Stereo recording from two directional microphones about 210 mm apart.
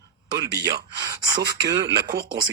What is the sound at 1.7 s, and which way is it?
Speech, 20° right (ahead or behind).